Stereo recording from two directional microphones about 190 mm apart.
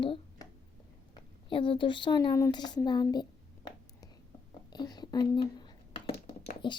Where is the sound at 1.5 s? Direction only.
25° left (ahead or behind).